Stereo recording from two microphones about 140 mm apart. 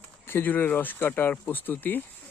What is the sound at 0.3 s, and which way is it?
Speech, 15° left (ahead or behind).